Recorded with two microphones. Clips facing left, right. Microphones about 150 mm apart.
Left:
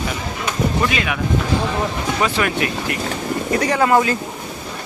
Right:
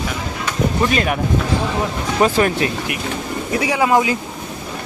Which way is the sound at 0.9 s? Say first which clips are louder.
Right 4 dB; 45° right (ahead or behind).